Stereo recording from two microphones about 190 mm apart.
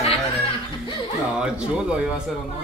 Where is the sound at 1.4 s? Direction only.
5° right (ahead or behind).